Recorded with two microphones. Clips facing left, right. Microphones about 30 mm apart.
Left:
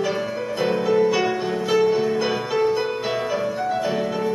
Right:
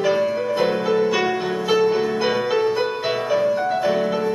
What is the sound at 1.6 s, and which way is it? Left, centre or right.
Music, centre.